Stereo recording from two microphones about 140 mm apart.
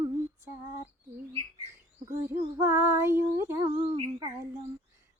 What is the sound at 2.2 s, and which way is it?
Female singing, 20° right (ahead or behind).